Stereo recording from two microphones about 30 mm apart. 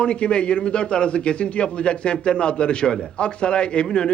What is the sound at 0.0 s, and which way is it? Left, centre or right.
A man's voice, left.